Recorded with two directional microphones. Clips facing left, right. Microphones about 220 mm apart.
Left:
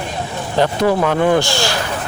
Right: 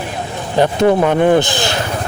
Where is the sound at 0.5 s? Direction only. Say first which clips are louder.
Right 3 dB; 20° right (ahead or behind).